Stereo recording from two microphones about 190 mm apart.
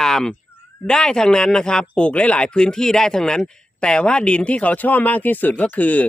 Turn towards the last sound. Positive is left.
turn(degrees=10)  # may be behind; listen again after turning